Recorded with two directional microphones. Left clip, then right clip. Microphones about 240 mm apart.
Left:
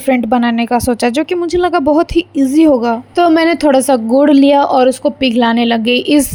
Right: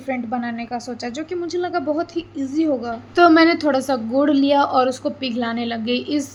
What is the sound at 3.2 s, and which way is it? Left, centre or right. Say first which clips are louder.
A woman's voice: left 2 dB; left.